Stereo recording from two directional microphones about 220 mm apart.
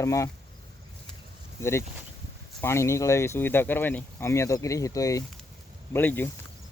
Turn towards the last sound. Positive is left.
turn(degrees=10)  # may be behind; listen again after turning